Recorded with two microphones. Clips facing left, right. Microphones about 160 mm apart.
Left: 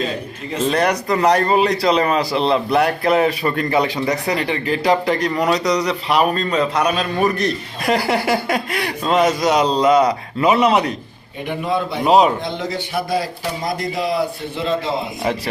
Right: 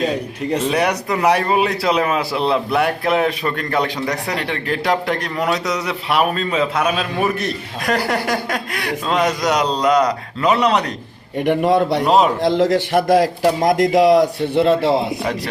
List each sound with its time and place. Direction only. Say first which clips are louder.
0.6 s speech: left 4 dB; 10° right (ahead or behind)
7.9 s a man's voice: left 2 dB; 10° left (ahead or behind)
11.4 s a man's voice: right 6 dB; 75° right (ahead or behind)
12.0 s speech: left 4 dB; centre (ahead or behind)
12.4 s a man's voice: right 9 dB; 90° right; by 14.9 s 65° right (ahead or behind)